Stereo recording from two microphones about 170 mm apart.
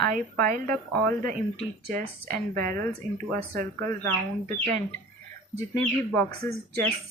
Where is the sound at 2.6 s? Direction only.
55° right (ahead or behind).